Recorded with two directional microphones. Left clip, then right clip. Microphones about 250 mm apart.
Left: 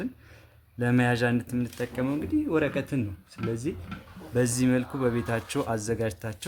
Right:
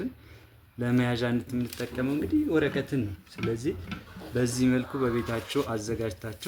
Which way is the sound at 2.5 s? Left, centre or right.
Left.